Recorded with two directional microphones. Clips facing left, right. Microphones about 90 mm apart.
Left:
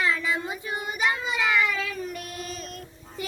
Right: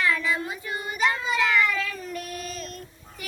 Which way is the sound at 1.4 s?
10° left (ahead or behind).